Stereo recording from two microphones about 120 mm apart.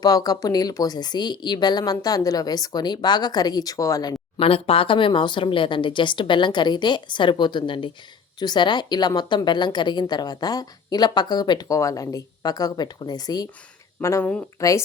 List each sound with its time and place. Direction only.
0.0 s a woman's voice: 30° left (ahead or behind)
4.4 s a woman's voice: 50° left (ahead or behind); by 14.7 s 25° left (ahead or behind)